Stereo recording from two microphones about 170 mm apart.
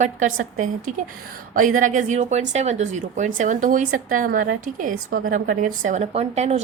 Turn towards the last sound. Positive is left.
turn(degrees=-40)  # may be behind; listen again after turning